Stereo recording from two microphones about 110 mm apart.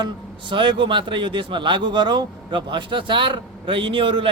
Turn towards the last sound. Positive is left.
turn(degrees=-50)  # may be behind; listen again after turning